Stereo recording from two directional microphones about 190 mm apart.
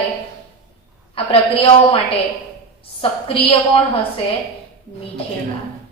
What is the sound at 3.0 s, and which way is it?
Speech, 30° left (ahead or behind).